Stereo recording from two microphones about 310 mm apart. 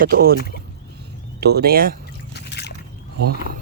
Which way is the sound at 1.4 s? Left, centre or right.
Right.